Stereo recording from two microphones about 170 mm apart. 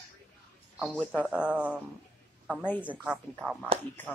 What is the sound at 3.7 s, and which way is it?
Speech, 35° right (ahead or behind).